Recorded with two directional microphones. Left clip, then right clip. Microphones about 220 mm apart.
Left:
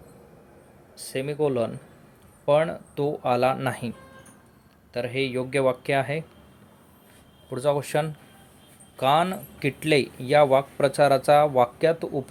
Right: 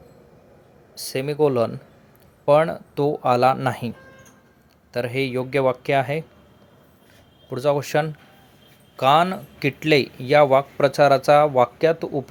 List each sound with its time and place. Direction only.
0.9 s speech: 20° right (ahead or behind)
4.9 s speech: 20° right (ahead or behind)
7.5 s speech: 15° right (ahead or behind)